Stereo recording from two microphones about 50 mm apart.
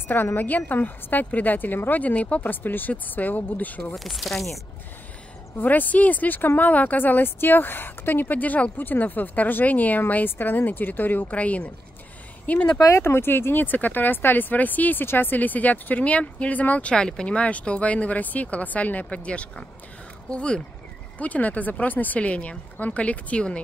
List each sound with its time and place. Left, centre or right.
0.4 s speech: left
3.9 s speech: centre
5.6 s speech: left
11.3 s speech: left
12.9 s speech: left
16.9 s speech: centre
21.2 s speech: left